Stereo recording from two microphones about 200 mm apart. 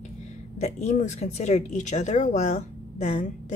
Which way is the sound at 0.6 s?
35° left (ahead or behind).